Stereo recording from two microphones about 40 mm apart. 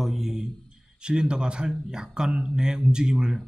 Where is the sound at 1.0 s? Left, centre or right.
Right.